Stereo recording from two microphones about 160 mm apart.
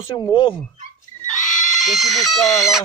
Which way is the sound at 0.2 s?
30° left (ahead or behind).